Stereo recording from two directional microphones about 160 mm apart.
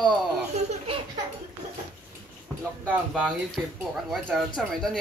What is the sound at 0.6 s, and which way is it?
Baby laughter, 45° right (ahead or behind).